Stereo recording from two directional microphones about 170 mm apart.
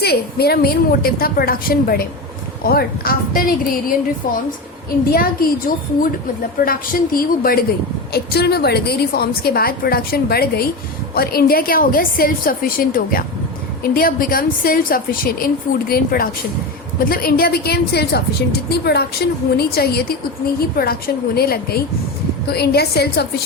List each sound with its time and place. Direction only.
0.0 s a woman's voice: 70° left (ahead or behind)
8.1 s a woman's voice: 70° left (ahead or behind)
21.3 s a woman's voice: 65° left (ahead or behind)